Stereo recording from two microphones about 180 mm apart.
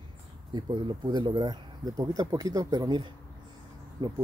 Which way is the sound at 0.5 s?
25° right (ahead or behind).